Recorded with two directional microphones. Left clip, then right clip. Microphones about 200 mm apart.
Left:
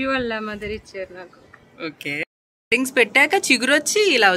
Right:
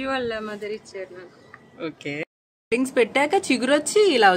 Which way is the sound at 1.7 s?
Centre (ahead or behind).